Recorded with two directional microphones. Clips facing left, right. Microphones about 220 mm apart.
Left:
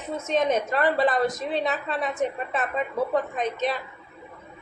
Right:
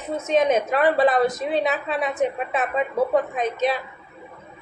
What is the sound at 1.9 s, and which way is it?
Speech, 15° right (ahead or behind).